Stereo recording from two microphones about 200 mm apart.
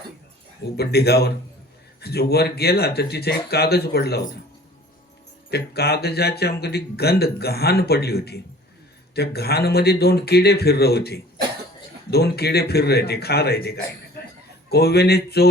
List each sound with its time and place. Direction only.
0.8 s speech: 50° left (ahead or behind)
5.5 s speech: 55° left (ahead or behind)